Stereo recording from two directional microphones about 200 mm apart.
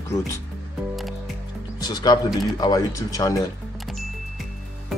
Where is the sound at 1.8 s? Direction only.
20° left (ahead or behind).